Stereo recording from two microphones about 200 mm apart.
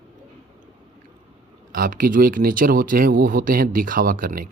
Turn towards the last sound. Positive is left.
turn(degrees=-45)  # may be behind; listen again after turning